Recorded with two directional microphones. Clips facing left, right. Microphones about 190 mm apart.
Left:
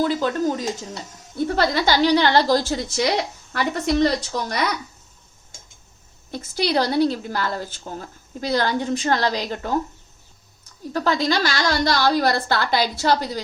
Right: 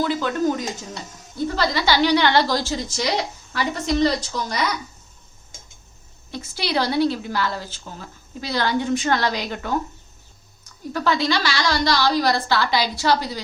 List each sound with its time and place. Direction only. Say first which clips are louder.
0.0 s speech: left 1 dB; 40° left (ahead or behind)
1.5 s speech: left 1 dB; 55° left (ahead or behind); by 2.6 s 40° left (ahead or behind)
2.6 s a woman's voice: left 3 dB; 55° left (ahead or behind)
6.3 s speech: left 3 dB; 45° left (ahead or behind)
10.9 s speech: left 1 dB; 40° left (ahead or behind)